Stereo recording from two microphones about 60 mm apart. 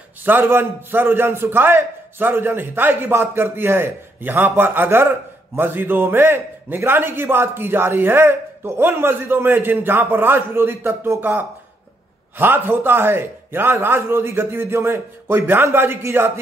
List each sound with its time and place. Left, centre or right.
0.2 s a man's voice: right
11.1 s a man's voice: right